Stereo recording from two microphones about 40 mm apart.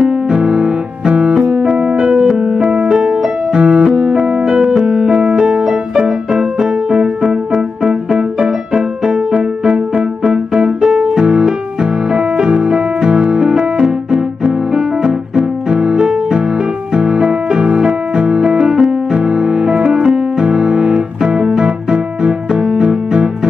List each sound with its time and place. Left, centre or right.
0.3 s music: centre
2.6 s music: right; by 6.7 s centre
8.4 s music: centre
9.3 s music: right
10.2 s music: centre
15.3 s music: centre